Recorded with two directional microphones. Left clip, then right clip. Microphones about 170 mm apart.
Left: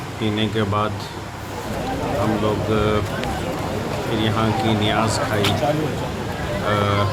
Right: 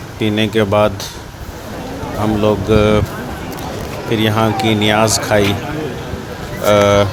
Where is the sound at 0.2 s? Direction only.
40° right (ahead or behind).